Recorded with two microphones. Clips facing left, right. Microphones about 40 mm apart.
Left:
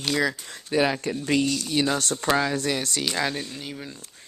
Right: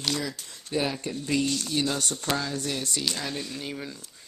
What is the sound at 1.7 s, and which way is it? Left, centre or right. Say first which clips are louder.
Speech: left 4 dB; left.